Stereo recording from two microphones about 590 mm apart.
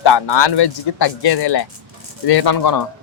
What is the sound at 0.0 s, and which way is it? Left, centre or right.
Speech, left.